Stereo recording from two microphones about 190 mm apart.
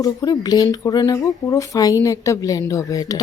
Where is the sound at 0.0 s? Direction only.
20° left (ahead or behind).